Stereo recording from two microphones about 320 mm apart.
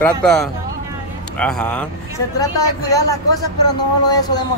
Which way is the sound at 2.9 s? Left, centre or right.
Centre.